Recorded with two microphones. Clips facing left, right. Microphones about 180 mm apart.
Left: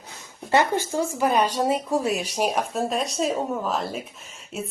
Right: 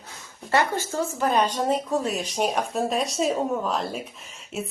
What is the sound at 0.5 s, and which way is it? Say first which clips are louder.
A woman's voice: left 2 dB; 15° left (ahead or behind).